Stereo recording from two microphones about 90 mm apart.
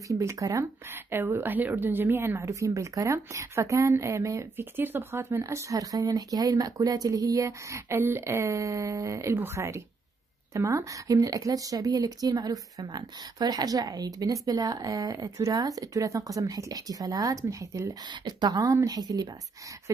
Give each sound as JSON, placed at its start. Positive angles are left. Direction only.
{"t": 0.1, "sound": "speech", "side_deg": -35}
{"t": 0.8, "sound": "a woman's voice", "side_deg": -25}
{"t": 5.4, "sound": "a woman's voice", "side_deg": -35}
{"t": 18.0, "sound": "a woman's voice", "side_deg": -55}